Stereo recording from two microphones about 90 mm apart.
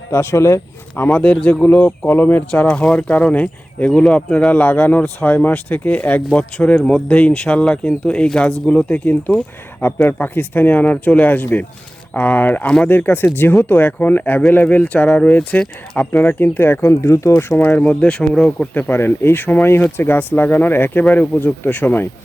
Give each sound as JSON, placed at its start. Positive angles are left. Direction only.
{"t": 0.1, "sound": "speech", "side_deg": 30}
{"t": 17.6, "sound": "speech", "side_deg": 20}
{"t": 18.7, "sound": "speech", "side_deg": 20}